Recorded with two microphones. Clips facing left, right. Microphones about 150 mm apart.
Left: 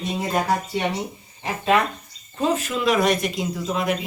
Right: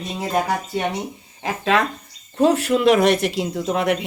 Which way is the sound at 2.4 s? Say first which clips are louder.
Right 6 dB; 70° right (ahead or behind).